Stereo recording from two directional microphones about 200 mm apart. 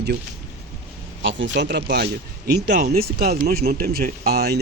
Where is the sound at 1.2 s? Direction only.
65° right (ahead or behind).